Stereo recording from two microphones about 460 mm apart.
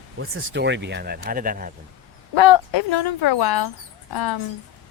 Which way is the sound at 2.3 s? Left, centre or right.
Left.